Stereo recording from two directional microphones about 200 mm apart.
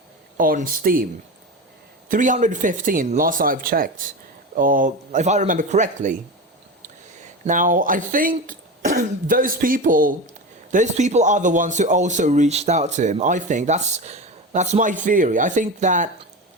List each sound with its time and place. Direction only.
0.3 s speech: 45° right (ahead or behind)
2.0 s speech: 40° right (ahead or behind)